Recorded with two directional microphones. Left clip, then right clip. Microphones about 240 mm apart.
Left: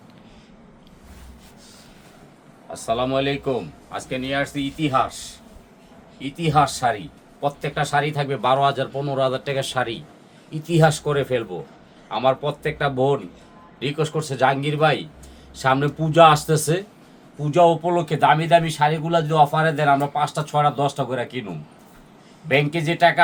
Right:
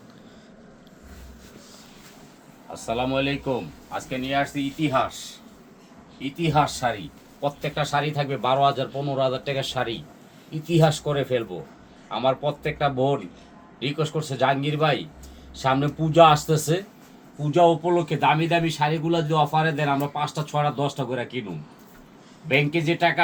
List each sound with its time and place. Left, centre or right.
2.7 s a man's voice: centre
6.2 s a man's voice: centre